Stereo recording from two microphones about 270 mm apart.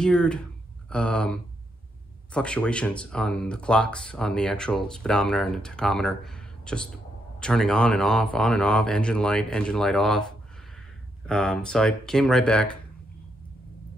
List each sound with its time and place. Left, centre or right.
0.0 s speech: centre